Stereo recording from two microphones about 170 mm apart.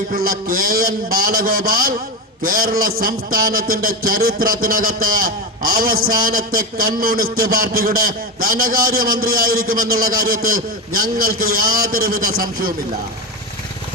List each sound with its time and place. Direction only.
0.1 s a man's voice: 60° right (ahead or behind)